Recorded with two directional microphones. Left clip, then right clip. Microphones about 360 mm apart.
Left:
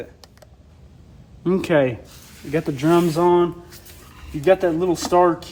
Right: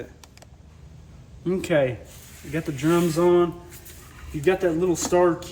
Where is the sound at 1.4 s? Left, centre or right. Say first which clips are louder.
Left 4 dB; centre.